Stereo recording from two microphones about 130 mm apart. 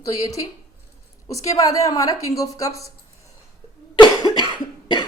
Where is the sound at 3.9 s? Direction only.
35° left (ahead or behind).